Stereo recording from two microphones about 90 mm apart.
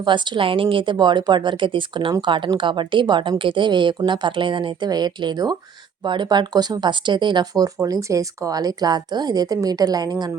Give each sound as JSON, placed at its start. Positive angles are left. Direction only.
{"t": 0.0, "sound": "a woman's voice", "side_deg": -60}
{"t": 4.9, "sound": "speech", "side_deg": -50}